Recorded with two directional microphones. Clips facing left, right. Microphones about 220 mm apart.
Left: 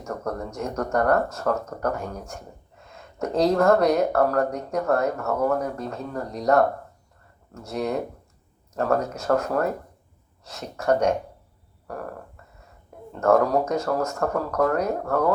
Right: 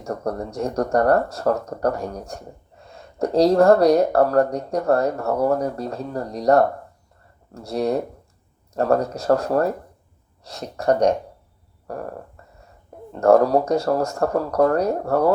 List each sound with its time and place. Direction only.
0.0 s speech: 35° right (ahead or behind)
13.1 s speech: 35° right (ahead or behind)